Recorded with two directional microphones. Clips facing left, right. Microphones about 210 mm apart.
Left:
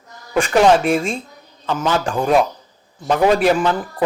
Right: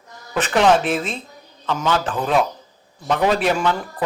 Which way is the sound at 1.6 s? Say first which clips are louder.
Left 2 dB; 10° left (ahead or behind).